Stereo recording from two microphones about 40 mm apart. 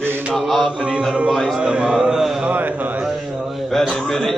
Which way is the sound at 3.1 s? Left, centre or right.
Centre.